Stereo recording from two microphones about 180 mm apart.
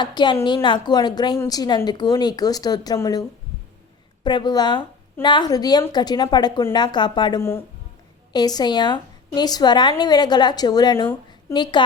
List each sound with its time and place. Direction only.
0.0 s a woman's voice: 25° left (ahead or behind)